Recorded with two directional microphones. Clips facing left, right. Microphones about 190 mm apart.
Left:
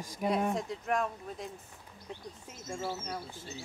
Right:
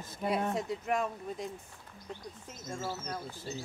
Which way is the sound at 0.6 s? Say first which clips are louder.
Even; 5° right (ahead or behind).